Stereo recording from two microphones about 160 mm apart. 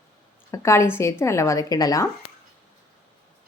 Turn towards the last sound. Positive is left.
turn(degrees=20)  # may be behind; listen again after turning